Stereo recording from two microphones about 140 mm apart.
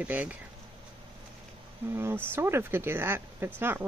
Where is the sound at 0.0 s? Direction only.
10° right (ahead or behind).